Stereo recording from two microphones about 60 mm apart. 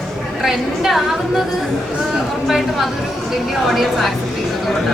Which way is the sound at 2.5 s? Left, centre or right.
Centre.